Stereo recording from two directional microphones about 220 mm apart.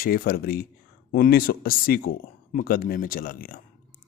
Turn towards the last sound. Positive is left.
turn(degrees=40)  # may be behind; listen again after turning